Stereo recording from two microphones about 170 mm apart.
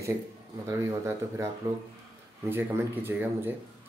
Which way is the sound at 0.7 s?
15° right (ahead or behind).